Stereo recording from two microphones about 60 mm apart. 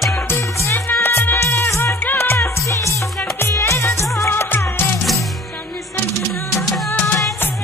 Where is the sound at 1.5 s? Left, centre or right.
Left.